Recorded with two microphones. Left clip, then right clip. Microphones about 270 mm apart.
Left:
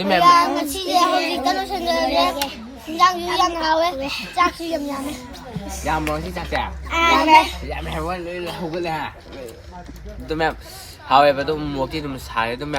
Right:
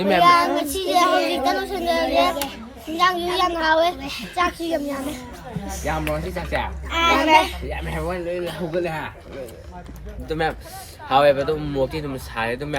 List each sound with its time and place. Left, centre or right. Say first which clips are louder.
0.2 s a child's voice: left 2 dB; centre
10.2 s a child's voice: left 2 dB; centre